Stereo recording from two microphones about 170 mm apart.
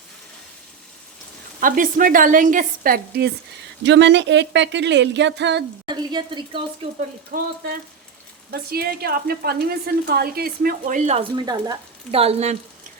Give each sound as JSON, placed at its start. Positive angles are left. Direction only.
{"t": 1.6, "sound": "a woman's voice", "side_deg": -55}
{"t": 3.8, "sound": "speech", "side_deg": -90}
{"t": 5.9, "sound": "a woman's voice", "side_deg": -25}
{"t": 7.3, "sound": "a woman's voice", "side_deg": -65}
{"t": 12.1, "sound": "speech", "side_deg": -35}